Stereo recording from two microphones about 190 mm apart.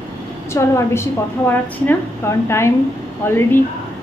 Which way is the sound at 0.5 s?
15° left (ahead or behind).